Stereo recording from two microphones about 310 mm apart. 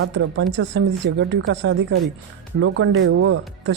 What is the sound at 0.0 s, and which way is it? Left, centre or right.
Speech, right.